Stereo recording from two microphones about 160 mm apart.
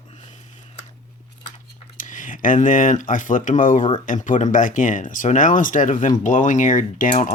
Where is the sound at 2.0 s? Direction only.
55° left (ahead or behind).